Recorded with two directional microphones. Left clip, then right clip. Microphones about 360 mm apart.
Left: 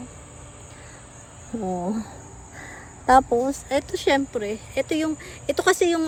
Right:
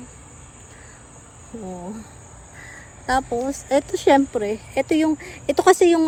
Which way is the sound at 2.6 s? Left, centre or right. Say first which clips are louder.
Left 5 dB; centre.